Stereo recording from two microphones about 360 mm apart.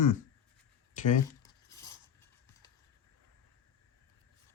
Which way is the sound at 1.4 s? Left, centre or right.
Centre.